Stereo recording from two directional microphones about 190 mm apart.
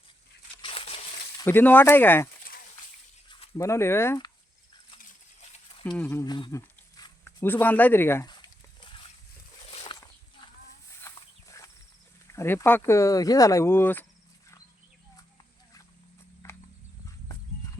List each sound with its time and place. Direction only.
0.6 s crumpling: 30° left (ahead or behind)
1.5 s speech: 10° left (ahead or behind)
3.6 s speech: 15° left (ahead or behind)
6.0 s a sound: 15° left (ahead or behind)
11.0 s livestock: 15° left (ahead or behind)
12.3 s speech: 15° left (ahead or behind)
16.4 s a sound: 15° left (ahead or behind)